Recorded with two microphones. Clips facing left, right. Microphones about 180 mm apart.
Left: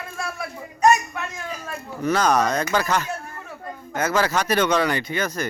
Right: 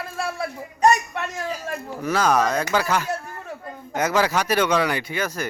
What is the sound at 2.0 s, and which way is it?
A man's voice, 5° right (ahead or behind).